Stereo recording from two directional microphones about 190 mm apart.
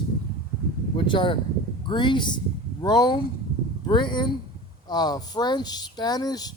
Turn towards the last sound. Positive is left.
turn(degrees=20)  # may be behind; listen again after turning